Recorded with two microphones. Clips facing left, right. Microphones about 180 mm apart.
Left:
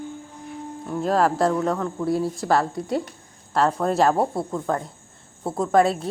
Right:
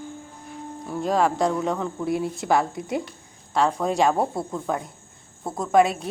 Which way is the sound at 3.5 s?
Centre (ahead or behind).